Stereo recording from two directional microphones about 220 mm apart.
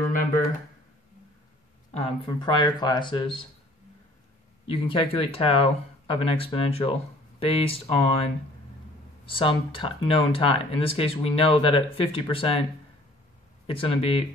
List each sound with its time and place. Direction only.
2.0 s speech: 20° left (ahead or behind)
4.6 s speech: 25° left (ahead or behind)
13.7 s speech: 25° left (ahead or behind)